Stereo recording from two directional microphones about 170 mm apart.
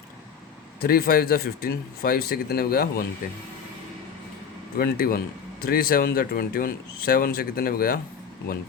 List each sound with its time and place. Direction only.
0.8 s speech: 60° left (ahead or behind)
4.8 s speech: 60° left (ahead or behind)